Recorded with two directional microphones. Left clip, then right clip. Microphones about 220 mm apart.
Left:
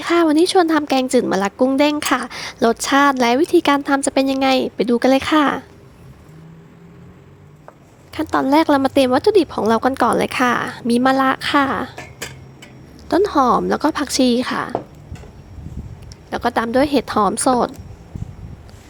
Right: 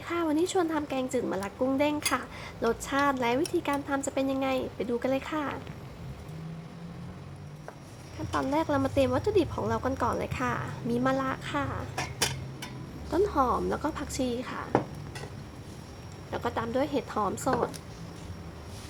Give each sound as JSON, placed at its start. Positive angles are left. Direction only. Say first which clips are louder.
{"t": 0.0, "sound": "speech", "louder": "left 14 dB", "side_deg": 40}
{"t": 8.3, "sound": "speech", "louder": "left 13 dB", "side_deg": 40}
{"t": 13.1, "sound": "speech", "louder": "left 11 dB", "side_deg": 35}
{"t": 16.3, "sound": "speech", "louder": "left 13 dB", "side_deg": 35}